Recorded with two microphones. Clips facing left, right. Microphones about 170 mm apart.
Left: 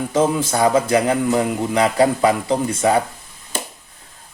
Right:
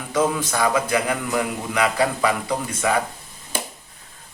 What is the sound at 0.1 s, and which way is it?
A man's voice, 25° left (ahead or behind).